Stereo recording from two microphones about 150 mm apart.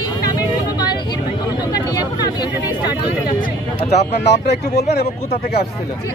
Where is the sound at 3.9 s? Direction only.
45° left (ahead or behind).